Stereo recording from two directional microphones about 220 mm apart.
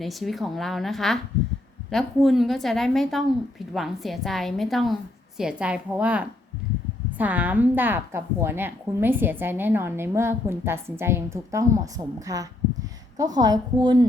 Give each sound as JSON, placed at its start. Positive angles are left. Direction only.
{"t": 0.0, "sound": "a woman's voice", "side_deg": 0}